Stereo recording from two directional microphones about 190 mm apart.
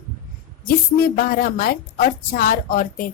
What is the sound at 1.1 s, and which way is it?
A woman's voice, 50° left (ahead or behind).